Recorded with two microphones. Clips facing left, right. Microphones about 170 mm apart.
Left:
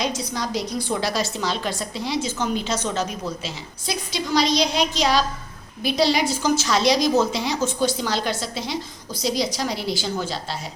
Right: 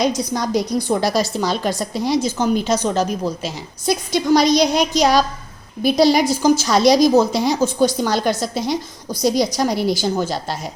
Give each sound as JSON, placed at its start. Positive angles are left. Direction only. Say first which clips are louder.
{"t": 0.0, "sound": "a woman's voice", "louder": "right 7 dB", "side_deg": -40}